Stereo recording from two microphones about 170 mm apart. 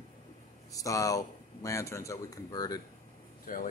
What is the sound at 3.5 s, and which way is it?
Speech, 55° left (ahead or behind).